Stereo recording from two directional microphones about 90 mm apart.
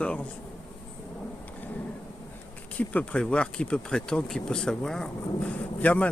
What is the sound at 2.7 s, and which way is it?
Speech, 15° left (ahead or behind).